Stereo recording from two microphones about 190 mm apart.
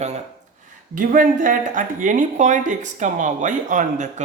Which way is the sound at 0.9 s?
45° right (ahead or behind).